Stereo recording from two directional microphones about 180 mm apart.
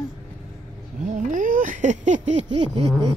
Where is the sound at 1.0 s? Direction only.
40° right (ahead or behind).